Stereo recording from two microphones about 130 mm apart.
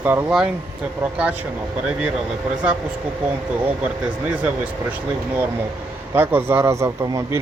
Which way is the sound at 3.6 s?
10° right (ahead or behind).